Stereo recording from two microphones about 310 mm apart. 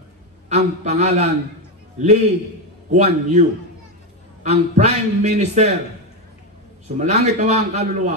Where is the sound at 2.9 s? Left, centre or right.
Right.